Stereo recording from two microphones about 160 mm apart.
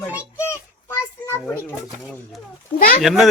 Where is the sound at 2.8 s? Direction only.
65° left (ahead or behind).